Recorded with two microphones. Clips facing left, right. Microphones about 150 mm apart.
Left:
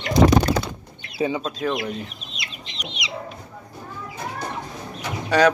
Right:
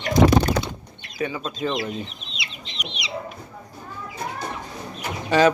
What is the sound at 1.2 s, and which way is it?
Speech, 25° left (ahead or behind).